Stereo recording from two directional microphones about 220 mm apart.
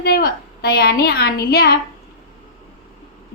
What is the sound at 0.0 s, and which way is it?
A woman's voice, 45° left (ahead or behind).